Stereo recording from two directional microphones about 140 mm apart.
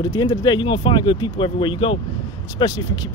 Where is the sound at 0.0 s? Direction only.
30° left (ahead or behind).